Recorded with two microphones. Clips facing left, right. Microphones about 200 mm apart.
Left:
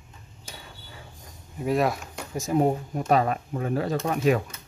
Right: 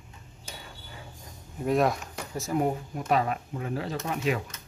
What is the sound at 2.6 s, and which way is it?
Speech, 35° left (ahead or behind).